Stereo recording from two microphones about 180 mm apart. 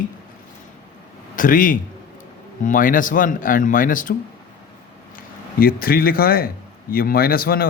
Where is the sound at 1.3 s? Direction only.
50° left (ahead or behind).